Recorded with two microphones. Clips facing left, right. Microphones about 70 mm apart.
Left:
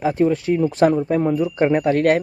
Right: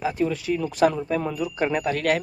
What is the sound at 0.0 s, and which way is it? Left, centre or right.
Speech, left.